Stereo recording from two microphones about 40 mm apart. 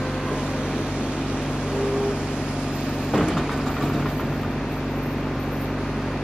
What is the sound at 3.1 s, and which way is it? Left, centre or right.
Vehicle, centre.